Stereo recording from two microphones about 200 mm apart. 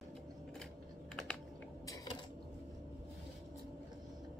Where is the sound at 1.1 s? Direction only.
5° left (ahead or behind).